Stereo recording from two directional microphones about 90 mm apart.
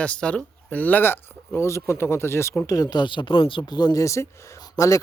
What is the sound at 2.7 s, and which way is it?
Speech, 45° left (ahead or behind).